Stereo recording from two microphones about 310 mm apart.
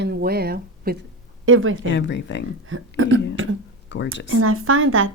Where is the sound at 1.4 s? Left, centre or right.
Right.